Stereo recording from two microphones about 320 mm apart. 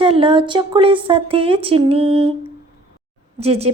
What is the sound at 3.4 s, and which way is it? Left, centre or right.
Speech, centre.